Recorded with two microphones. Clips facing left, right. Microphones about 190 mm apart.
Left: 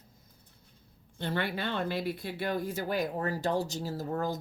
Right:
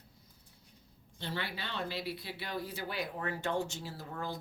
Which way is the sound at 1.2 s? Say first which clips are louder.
Left 8 dB; 55° left (ahead or behind).